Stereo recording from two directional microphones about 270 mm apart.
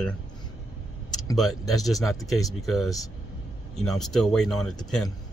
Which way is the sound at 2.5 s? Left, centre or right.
Centre.